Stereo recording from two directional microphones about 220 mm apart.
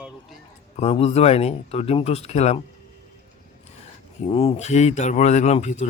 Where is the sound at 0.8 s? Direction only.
25° left (ahead or behind).